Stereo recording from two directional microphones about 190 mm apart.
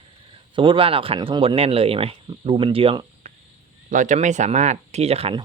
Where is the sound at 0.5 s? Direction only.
25° right (ahead or behind).